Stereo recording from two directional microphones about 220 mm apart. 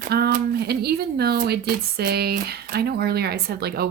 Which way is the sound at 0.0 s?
45° right (ahead or behind).